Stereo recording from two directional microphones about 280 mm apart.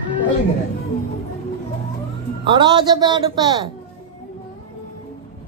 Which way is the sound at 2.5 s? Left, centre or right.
Centre.